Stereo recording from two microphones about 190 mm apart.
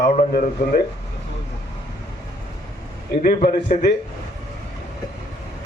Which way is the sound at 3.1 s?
50° left (ahead or behind).